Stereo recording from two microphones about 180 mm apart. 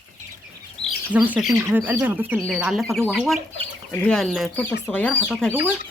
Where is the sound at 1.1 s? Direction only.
10° right (ahead or behind).